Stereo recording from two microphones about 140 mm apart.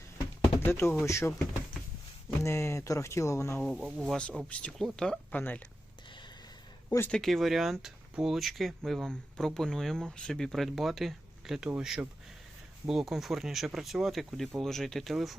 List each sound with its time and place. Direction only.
0.6 s speech: 15° left (ahead or behind)
2.4 s speech: 20° left (ahead or behind)
3.6 s speech: 5° left (ahead or behind)
4.2 s speech: 10° left (ahead or behind)
7.1 s speech: centre (ahead or behind)